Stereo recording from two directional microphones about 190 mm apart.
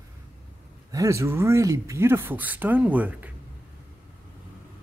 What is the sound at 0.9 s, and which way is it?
Speech, 15° right (ahead or behind).